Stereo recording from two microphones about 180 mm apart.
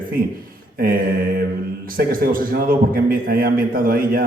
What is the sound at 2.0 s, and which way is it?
A man's voice, 55° right (ahead or behind).